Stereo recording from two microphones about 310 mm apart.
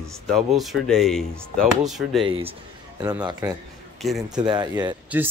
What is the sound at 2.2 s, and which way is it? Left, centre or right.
Speech, centre.